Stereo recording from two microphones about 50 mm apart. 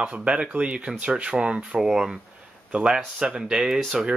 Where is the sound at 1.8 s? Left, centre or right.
Centre.